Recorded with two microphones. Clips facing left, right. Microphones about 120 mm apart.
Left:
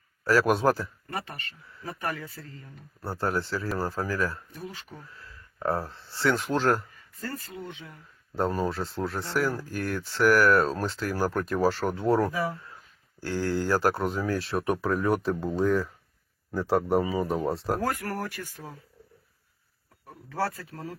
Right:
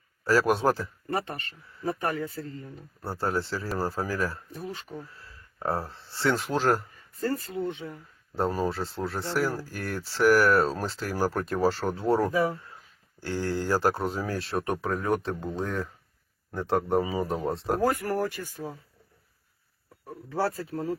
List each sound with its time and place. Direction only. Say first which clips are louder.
0.4 s speech: left 1 dB; centre (ahead or behind)
1.1 s speech: right 6 dB; 30° right (ahead or behind)
3.0 s speech: even; centre (ahead or behind)
5.5 s speech: left 1 dB; 5° right (ahead or behind)
7.2 s speech: right 8 dB; 30° right (ahead or behind)
8.4 s speech: even; 5° right (ahead or behind)
12.7 s a sound: even; centre (ahead or behind)
13.7 s speech: even; centre (ahead or behind)
17.8 s speech: right 4 dB; 25° right (ahead or behind)